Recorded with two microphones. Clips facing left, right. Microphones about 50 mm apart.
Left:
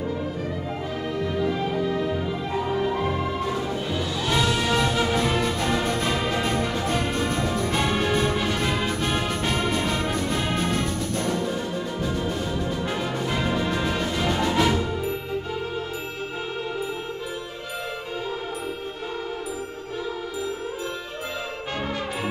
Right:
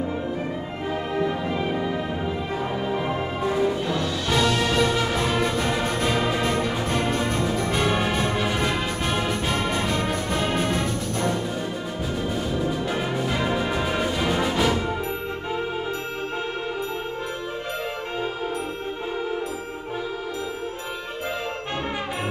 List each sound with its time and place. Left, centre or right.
1.1 s music: right
3.9 s music: centre
12.9 s music: centre